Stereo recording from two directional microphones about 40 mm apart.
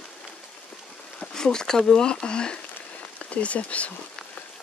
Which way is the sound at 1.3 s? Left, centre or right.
Centre.